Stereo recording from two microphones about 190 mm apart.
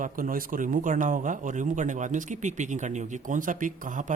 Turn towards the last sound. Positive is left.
turn(degrees=-40)  # may be behind; listen again after turning